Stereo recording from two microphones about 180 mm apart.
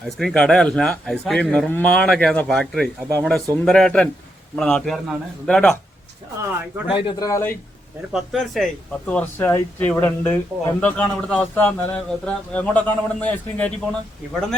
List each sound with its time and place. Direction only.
0.2 s a man's voice: 5° left (ahead or behind)
6.8 s speech: 30° left (ahead or behind)
7.3 s a man's voice: 15° left (ahead or behind)
8.1 s a man's voice: centre (ahead or behind)